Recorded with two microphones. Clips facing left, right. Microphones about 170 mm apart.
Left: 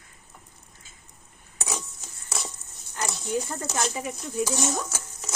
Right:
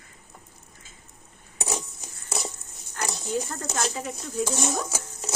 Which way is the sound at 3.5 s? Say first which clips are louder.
Left 1 dB; 15° left (ahead or behind).